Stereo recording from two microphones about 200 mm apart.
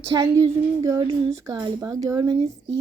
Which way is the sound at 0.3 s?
30° right (ahead or behind).